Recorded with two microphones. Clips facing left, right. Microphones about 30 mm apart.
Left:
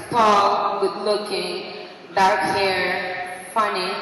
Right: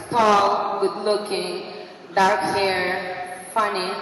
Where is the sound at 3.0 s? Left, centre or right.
Left.